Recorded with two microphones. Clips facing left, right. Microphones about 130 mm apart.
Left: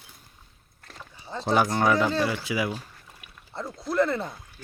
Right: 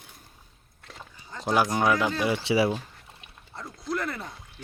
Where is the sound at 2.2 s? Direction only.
20° right (ahead or behind).